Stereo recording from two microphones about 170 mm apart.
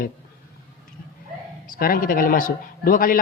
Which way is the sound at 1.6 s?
60° left (ahead or behind).